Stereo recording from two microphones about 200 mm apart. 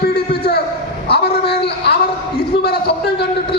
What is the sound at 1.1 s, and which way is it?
Speech, 55° left (ahead or behind).